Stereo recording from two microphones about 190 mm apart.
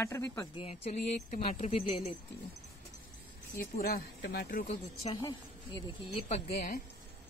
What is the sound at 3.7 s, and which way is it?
Speech, 50° left (ahead or behind).